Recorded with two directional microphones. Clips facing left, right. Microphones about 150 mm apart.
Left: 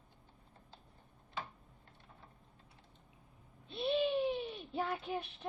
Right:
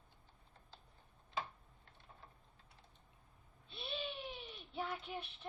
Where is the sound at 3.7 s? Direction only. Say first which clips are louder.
Left 13 dB; 45° left (ahead or behind).